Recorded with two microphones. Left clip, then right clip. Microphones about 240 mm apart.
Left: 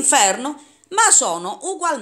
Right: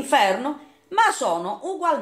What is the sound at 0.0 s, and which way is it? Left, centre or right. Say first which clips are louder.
A woman's voice: left 2 dB; left.